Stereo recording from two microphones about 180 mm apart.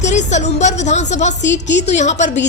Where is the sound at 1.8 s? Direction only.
40° left (ahead or behind).